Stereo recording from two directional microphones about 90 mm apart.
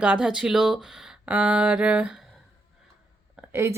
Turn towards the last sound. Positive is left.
turn(degrees=-30)  # may be behind; listen again after turning